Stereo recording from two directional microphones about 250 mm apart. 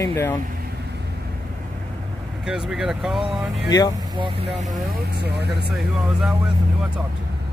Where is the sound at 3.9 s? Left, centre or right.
Right.